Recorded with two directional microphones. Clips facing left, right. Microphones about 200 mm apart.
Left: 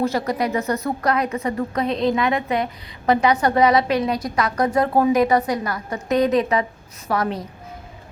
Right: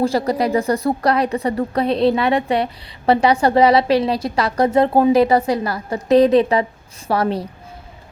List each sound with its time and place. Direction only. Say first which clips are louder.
0.0 s a woman's voice: right 4 dB; 30° right (ahead or behind)